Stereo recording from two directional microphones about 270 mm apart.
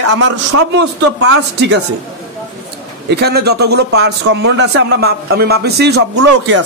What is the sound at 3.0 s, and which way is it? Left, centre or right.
A man's voice, right.